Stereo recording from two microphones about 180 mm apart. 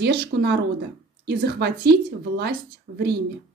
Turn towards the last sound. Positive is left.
turn(degrees=-75)  # may be behind; listen again after turning